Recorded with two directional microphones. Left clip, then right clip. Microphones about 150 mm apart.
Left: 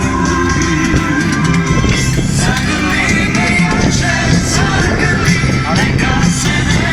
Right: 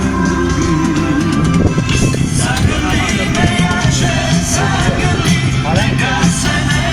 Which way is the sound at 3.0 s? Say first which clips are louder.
Left 2 dB; 15° left (ahead or behind).